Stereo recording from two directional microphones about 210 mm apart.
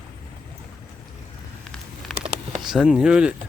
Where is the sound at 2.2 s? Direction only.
30° right (ahead or behind).